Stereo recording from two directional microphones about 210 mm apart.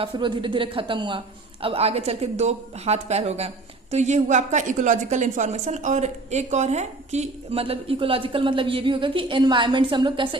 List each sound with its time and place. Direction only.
0.0 s a woman's voice: 25° right (ahead or behind)